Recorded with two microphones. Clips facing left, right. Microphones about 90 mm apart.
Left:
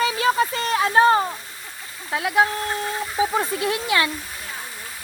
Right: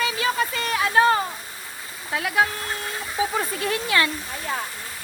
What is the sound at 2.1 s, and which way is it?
Speech, 25° left (ahead or behind).